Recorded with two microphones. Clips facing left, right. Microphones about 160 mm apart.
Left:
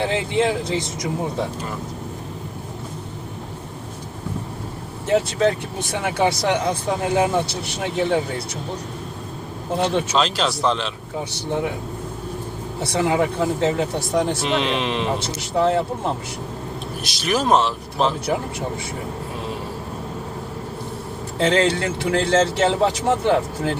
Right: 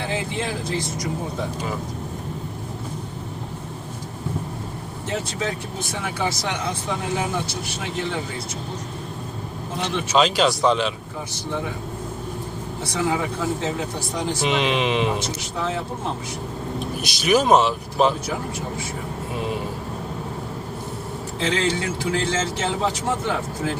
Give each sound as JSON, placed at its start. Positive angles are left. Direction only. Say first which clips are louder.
{"t": 0.0, "sound": "speech", "louder": "left 6 dB", "side_deg": 70}
{"t": 5.1, "sound": "speech", "louder": "left 9 dB", "side_deg": 65}
{"t": 10.1, "sound": "speech", "louder": "right 2 dB", "side_deg": -5}
{"t": 11.3, "sound": "speech", "louder": "left 4 dB", "side_deg": 60}
{"t": 12.8, "sound": "speech", "louder": "left 4 dB", "side_deg": 65}
{"t": 14.4, "sound": "speech", "louder": "even", "side_deg": -5}
{"t": 15.4, "sound": "speech", "louder": "left 8 dB", "side_deg": 60}
{"t": 17.0, "sound": "speech", "louder": "right 3 dB", "side_deg": -5}
{"t": 21.3, "sound": "speech", "louder": "left 5 dB", "side_deg": 60}